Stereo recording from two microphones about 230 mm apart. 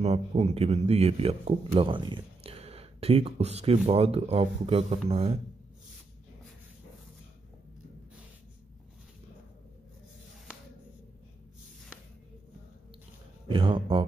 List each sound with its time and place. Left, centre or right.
0.0 s a man's voice: right
13.5 s a man's voice: right